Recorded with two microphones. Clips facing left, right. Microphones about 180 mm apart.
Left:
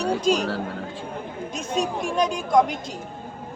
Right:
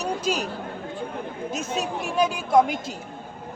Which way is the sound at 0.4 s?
90° left.